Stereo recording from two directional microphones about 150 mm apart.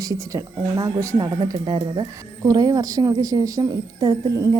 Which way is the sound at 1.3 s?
30° right (ahead or behind).